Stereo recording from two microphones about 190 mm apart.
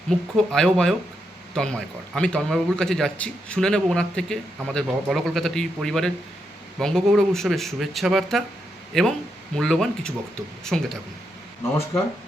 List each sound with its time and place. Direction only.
0.3 s a man's voice: 5° left (ahead or behind)